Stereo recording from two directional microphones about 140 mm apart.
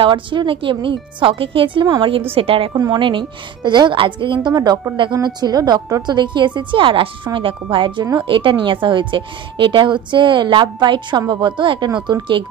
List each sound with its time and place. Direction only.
0.0 s a woman's voice: 35° right (ahead or behind)